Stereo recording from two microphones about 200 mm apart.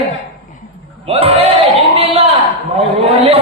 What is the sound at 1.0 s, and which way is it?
Speech, 30° right (ahead or behind).